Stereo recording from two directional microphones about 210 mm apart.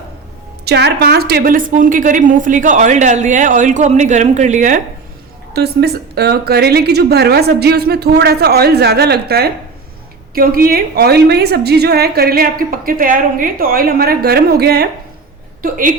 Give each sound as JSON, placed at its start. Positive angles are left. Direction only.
{"t": 0.6, "sound": "a woman's voice", "side_deg": -50}
{"t": 5.5, "sound": "a woman's voice", "side_deg": -50}